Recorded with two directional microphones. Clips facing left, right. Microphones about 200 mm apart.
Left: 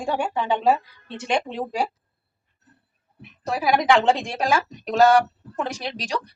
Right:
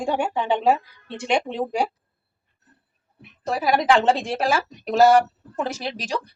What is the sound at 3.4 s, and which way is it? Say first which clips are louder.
Speech: even; centre (ahead or behind).